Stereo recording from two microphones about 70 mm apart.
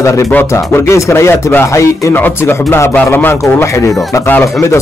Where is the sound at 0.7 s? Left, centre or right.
Left.